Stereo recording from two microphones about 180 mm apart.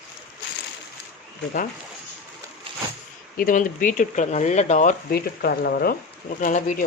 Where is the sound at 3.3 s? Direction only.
50° left (ahead or behind).